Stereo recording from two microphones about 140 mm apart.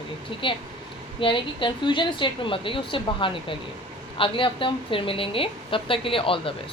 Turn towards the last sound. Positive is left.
turn(degrees=40)  # may be behind; listen again after turning